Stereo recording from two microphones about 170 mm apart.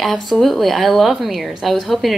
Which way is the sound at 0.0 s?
Centre (ahead or behind).